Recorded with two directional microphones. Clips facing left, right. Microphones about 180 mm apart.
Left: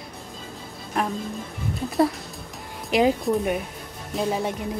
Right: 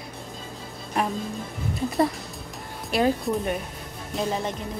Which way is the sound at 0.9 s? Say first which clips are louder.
Even; centre (ahead or behind).